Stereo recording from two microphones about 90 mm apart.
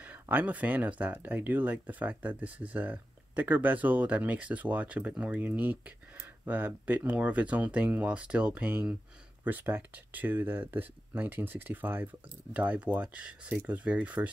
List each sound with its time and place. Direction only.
0.0 s speech: 20° right (ahead or behind)